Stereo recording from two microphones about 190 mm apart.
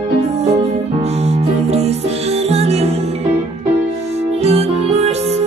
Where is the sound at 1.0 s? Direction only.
35° right (ahead or behind).